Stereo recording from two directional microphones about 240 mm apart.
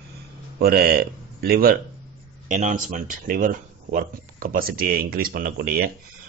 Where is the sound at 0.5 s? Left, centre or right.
Right.